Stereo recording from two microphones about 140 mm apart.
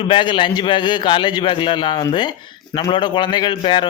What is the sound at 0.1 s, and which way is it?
A man's voice, 35° left (ahead or behind).